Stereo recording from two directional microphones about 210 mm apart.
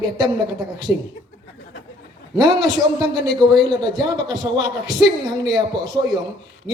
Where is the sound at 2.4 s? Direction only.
20° right (ahead or behind).